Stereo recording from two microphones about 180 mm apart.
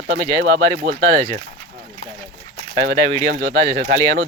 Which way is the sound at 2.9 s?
15° left (ahead or behind).